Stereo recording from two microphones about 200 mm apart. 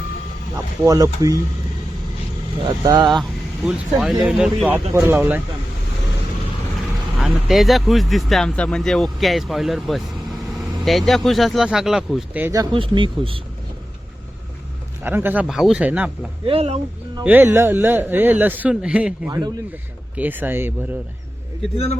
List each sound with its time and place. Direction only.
0.5 s speech: 15° right (ahead or behind)
2.6 s speech: 20° right (ahead or behind)
3.7 s speech: 5° right (ahead or behind)
6.7 s speech: centre (ahead or behind)
12.7 s speech: 25° right (ahead or behind)
15.0 s speech: 10° right (ahead or behind)
16.5 s speech: 30° right (ahead or behind)
17.2 s speech: 10° right (ahead or behind)
19.3 s speech: 20° right (ahead or behind)
20.1 s speech: 10° right (ahead or behind)